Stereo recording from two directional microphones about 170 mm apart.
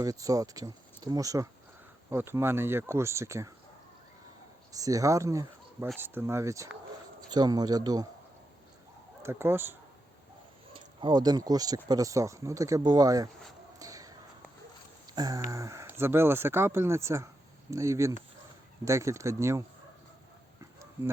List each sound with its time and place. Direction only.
0.0 s speech: 20° right (ahead or behind)
4.7 s speech: 20° right (ahead or behind)
9.2 s speech: 15° right (ahead or behind)
10.8 s speech: 25° right (ahead or behind)
13.7 s a sound: 20° right (ahead or behind)
15.4 s speech: 20° right (ahead or behind)